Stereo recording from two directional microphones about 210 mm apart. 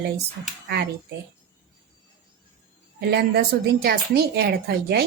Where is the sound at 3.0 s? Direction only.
50° right (ahead or behind).